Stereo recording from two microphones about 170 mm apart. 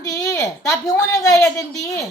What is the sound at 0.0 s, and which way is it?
A woman's voice, 20° left (ahead or behind).